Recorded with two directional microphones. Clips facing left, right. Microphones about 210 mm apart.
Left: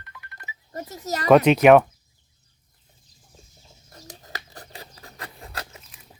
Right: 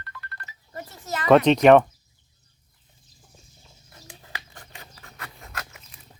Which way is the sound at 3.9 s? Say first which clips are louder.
Left 3 dB; 40° left (ahead or behind).